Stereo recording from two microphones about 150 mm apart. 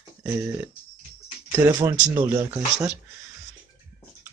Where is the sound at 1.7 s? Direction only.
20° right (ahead or behind).